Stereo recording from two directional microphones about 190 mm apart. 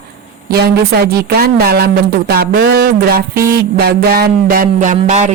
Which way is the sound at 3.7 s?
55° right (ahead or behind).